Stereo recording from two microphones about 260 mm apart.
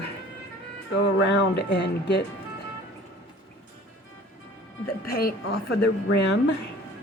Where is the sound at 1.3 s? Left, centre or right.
Left.